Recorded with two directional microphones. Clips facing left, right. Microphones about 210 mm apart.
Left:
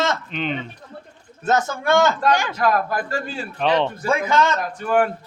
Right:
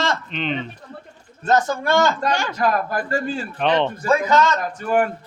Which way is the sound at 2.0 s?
15° left (ahead or behind).